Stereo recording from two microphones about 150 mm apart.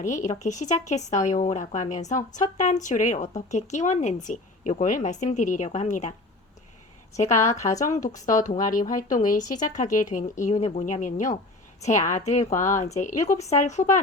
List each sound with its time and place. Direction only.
0.0 s speech: 55° left (ahead or behind)
7.3 s a woman's voice: 20° left (ahead or behind)
7.8 s speech: 50° left (ahead or behind)